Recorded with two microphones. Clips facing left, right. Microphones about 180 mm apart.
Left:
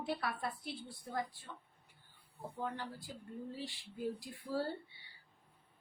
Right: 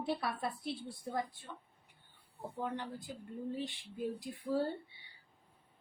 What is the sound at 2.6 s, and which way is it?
A woman's voice, 20° right (ahead or behind).